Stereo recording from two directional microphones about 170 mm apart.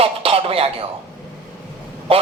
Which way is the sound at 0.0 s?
35° right (ahead or behind).